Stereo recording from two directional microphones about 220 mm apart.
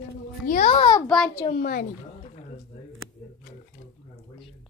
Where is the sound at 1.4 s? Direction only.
40° left (ahead or behind).